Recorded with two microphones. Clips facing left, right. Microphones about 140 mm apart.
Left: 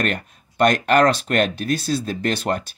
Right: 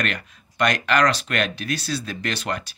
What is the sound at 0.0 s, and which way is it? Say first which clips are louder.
Speech: left 4 dB; 45° left (ahead or behind).